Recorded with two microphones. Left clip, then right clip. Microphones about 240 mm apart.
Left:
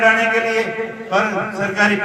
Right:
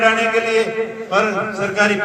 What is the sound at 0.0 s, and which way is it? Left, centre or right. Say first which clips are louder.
Speech: left 1 dB; right.